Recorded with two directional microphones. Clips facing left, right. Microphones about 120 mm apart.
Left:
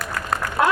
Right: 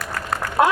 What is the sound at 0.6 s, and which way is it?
Applause, 25° right (ahead or behind).